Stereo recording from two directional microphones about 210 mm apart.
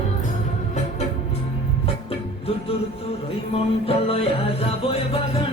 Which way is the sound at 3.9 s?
30° left (ahead or behind).